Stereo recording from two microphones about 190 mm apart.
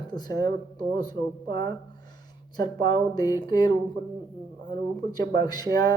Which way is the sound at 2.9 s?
20° left (ahead or behind).